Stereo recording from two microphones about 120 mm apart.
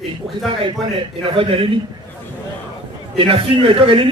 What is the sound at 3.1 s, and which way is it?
Speech, 50° right (ahead or behind).